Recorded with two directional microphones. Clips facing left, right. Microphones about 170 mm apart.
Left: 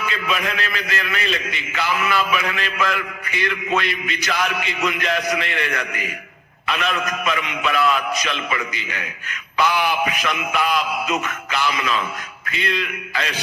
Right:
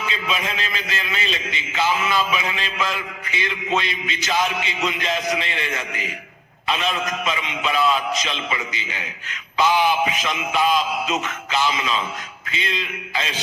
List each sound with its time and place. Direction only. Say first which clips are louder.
0.0 s a man's voice: left 2 dB; 25° right (ahead or behind)